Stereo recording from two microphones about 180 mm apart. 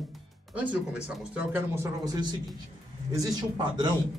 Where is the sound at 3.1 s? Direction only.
20° right (ahead or behind).